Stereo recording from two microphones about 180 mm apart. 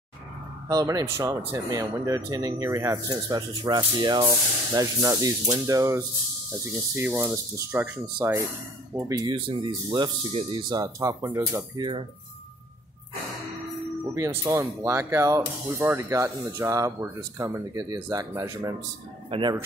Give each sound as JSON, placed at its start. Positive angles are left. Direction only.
{"t": 0.7, "sound": "speech", "side_deg": -20}
{"t": 14.1, "sound": "speech", "side_deg": -15}
{"t": 19.3, "sound": "speech", "side_deg": -30}